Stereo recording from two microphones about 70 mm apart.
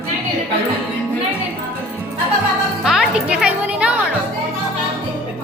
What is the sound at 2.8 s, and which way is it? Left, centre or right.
Music, centre.